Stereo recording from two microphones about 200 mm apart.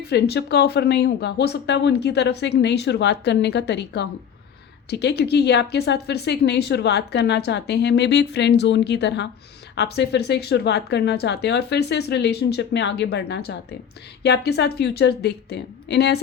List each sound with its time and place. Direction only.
0.0 s speech: 55° left (ahead or behind)